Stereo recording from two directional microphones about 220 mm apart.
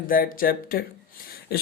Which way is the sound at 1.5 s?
45° left (ahead or behind).